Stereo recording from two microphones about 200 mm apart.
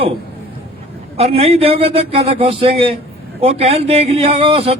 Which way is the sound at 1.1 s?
30° right (ahead or behind).